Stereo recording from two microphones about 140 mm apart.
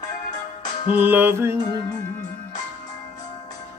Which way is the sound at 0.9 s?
15° right (ahead or behind).